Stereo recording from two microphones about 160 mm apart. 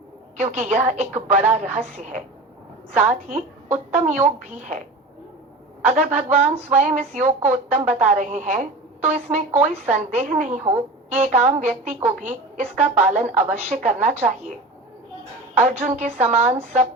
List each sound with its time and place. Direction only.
0.3 s a woman's voice: 45° right (ahead or behind)
5.8 s a woman's voice: 50° right (ahead or behind)
15.5 s a woman's voice: 45° right (ahead or behind)